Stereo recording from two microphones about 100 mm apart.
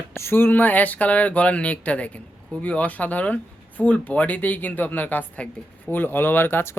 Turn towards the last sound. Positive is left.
turn(degrees=20)  # may be behind; listen again after turning